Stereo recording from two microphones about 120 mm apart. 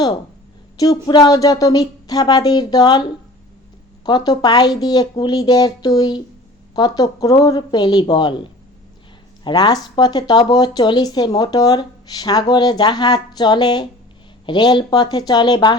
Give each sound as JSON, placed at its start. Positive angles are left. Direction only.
{"t": 0.8, "sound": "speech", "side_deg": 35}
{"t": 9.4, "sound": "speech", "side_deg": 40}